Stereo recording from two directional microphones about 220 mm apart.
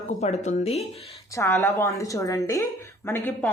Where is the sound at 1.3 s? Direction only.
10° left (ahead or behind).